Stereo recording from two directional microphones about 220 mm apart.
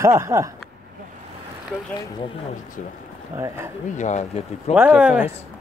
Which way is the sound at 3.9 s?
30° left (ahead or behind).